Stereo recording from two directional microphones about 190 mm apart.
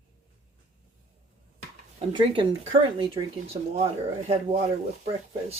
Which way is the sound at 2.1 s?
25° right (ahead or behind).